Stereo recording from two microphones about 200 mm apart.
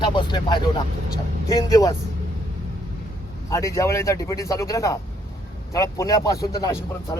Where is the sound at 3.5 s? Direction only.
15° left (ahead or behind).